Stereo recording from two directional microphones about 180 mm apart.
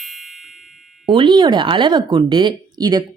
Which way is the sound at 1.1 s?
25° right (ahead or behind).